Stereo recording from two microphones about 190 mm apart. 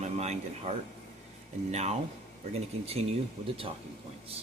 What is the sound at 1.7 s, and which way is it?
Speech, 35° right (ahead or behind).